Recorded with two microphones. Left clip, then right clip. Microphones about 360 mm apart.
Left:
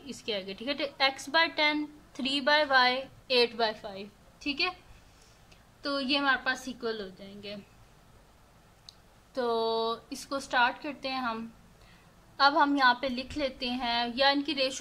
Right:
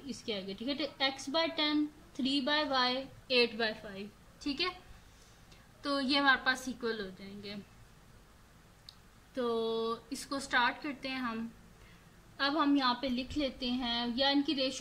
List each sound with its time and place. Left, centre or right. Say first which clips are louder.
0.0 s a woman's voice: left 4 dB; left
5.8 s a woman's voice: left 2 dB; centre
8.8 s a woman's voice: left 2 dB; centre